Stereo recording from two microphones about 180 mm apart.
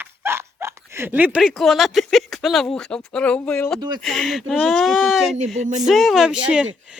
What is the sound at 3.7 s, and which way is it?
Speech, 25° right (ahead or behind).